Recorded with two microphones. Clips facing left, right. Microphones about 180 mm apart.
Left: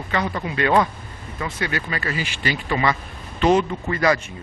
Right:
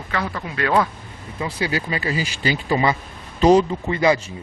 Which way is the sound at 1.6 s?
25° right (ahead or behind).